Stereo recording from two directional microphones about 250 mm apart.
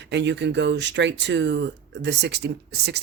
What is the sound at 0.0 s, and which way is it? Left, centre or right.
Speech, right.